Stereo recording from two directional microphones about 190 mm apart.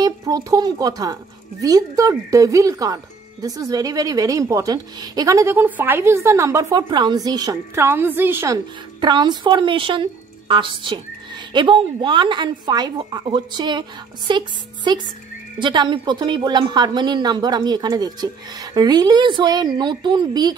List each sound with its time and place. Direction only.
0.0 s a woman's voice: 20° right (ahead or behind)
9.0 s a woman's voice: 25° right (ahead or behind)